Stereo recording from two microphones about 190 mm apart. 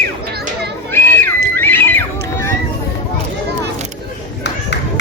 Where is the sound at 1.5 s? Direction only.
10° left (ahead or behind).